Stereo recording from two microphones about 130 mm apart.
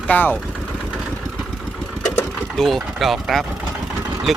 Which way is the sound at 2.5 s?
Centre (ahead or behind).